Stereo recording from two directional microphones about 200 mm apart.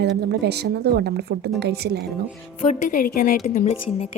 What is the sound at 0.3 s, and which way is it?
A woman's voice, 55° right (ahead or behind).